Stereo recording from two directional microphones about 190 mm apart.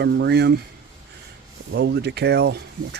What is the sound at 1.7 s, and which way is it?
Speech, 60° right (ahead or behind).